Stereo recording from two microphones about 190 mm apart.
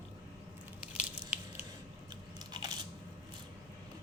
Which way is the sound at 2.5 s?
20° right (ahead or behind).